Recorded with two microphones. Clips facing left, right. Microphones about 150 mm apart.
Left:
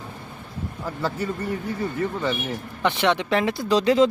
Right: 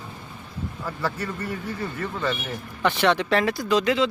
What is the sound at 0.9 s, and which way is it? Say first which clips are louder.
Speech: left 3 dB; 25° left (ahead or behind).